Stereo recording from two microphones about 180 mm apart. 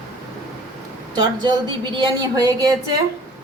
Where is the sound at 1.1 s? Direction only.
25° right (ahead or behind).